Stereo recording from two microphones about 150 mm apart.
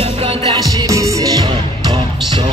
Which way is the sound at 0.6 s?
25° right (ahead or behind).